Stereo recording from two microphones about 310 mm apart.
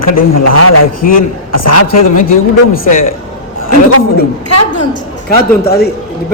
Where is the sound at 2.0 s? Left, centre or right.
Left.